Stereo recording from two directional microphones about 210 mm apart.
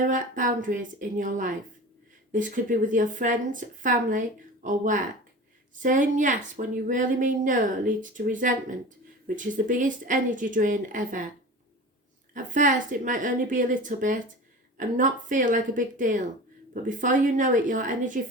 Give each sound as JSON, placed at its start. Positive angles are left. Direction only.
{"t": 0.0, "sound": "a woman's voice", "side_deg": -40}
{"t": 12.3, "sound": "a woman's voice", "side_deg": -40}